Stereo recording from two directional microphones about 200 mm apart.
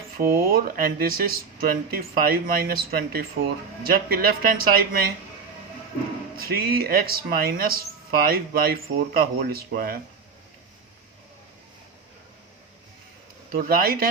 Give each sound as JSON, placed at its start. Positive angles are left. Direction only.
{"t": 0.2, "sound": "speech", "side_deg": -45}
{"t": 6.3, "sound": "speech", "side_deg": -50}
{"t": 13.5, "sound": "speech", "side_deg": -45}